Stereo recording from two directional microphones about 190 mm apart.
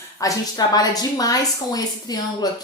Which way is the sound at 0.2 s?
20° left (ahead or behind).